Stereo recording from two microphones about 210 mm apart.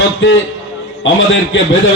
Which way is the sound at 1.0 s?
60° left (ahead or behind).